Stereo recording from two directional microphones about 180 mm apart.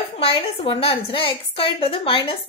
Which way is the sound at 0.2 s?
30° left (ahead or behind).